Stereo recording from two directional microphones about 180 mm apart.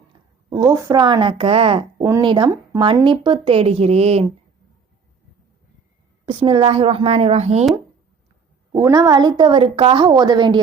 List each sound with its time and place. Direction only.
0.5 s a woman's voice: 20° right (ahead or behind)
2.0 s speech: 15° right (ahead or behind)
2.2 s speech: 25° right (ahead or behind)
6.4 s speech: 30° right (ahead or behind)
8.7 s a woman's voice: 20° right (ahead or behind)